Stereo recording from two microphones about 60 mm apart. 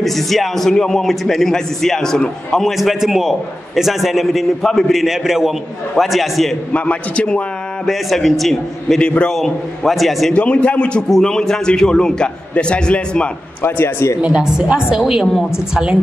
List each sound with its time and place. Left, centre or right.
0.0 s a man's voice: centre
5.0 s a man's voice: centre
6.7 s a man's voice: left
7.8 s a man's voice: centre
10.3 s a man's voice: left
11.1 s a man's voice: centre
13.6 s speech: left
14.2 s a woman's voice: centre